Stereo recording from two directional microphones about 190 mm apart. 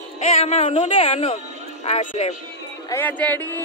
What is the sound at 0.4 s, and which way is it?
A woman's voice, 30° left (ahead or behind).